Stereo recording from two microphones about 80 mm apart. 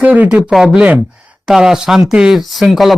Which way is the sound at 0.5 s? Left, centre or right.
Centre.